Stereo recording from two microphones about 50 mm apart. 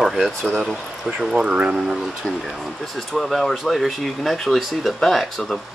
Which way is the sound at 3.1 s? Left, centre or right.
Centre.